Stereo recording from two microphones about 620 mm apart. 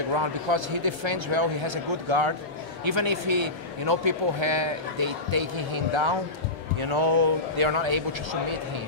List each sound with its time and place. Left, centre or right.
0.1 s a man's voice: right